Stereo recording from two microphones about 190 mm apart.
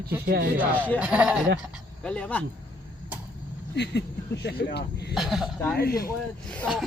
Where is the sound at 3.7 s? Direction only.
65° left (ahead or behind).